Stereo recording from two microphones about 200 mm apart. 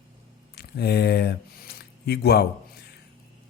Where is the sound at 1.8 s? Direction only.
55° left (ahead or behind).